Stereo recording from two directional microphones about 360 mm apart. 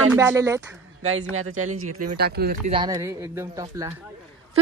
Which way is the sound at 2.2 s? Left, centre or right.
Right.